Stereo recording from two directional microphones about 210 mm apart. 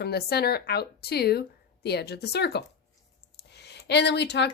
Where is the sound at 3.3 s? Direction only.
55° left (ahead or behind).